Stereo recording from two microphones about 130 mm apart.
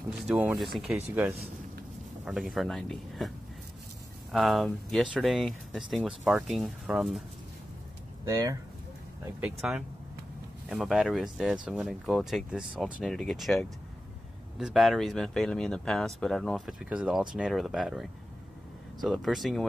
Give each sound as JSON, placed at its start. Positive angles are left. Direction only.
{"t": 0.3, "sound": "speech", "side_deg": -5}
{"t": 2.2, "sound": "speech", "side_deg": 0}
{"t": 8.3, "sound": "speech", "side_deg": -25}
{"t": 9.4, "sound": "speech", "side_deg": -5}